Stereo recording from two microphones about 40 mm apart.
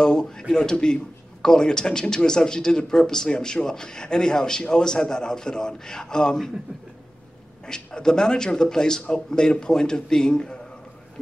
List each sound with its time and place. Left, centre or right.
0.0 s a sound: centre
1.4 s a man's voice: centre
7.6 s a man's voice: centre